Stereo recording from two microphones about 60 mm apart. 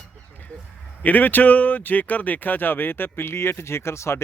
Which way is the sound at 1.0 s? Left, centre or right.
Left.